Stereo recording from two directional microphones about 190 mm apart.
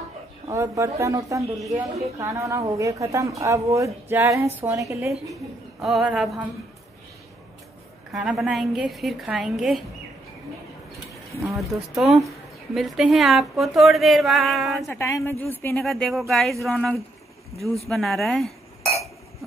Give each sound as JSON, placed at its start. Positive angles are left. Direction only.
{"t": 0.5, "sound": "a woman's voice", "side_deg": -15}
{"t": 5.3, "sound": "speech", "side_deg": 0}
{"t": 8.1, "sound": "speech", "side_deg": -5}
{"t": 11.4, "sound": "speech", "side_deg": 0}
{"t": 14.9, "sound": "speech", "side_deg": 15}